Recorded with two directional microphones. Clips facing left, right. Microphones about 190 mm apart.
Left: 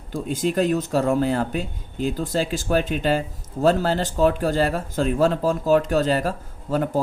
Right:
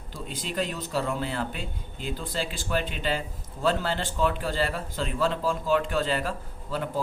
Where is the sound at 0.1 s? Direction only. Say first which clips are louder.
Left 12 dB; 45° left (ahead or behind).